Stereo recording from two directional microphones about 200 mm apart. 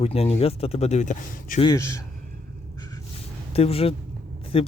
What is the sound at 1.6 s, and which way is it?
Speech, 15° left (ahead or behind).